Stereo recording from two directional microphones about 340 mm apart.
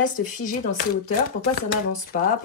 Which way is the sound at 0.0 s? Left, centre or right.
Left.